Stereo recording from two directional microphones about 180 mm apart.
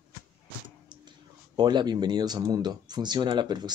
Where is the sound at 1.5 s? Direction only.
25° right (ahead or behind).